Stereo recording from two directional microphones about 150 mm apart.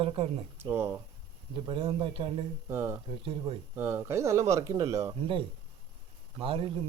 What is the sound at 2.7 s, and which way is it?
Speech, 15° right (ahead or behind).